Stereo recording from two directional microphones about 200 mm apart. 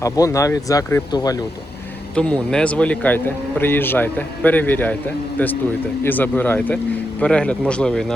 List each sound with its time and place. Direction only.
0.0 s a man's voice: 15° left (ahead or behind)
2.1 s a man's voice: 5° left (ahead or behind)